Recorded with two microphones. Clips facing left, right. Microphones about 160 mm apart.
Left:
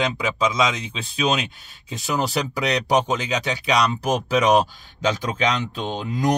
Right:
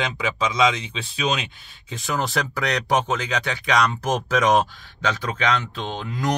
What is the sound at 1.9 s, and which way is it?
Speech, 10° left (ahead or behind).